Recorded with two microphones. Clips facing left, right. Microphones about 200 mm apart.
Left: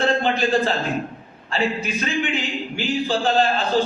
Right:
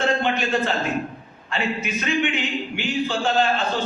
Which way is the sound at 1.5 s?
35° left (ahead or behind).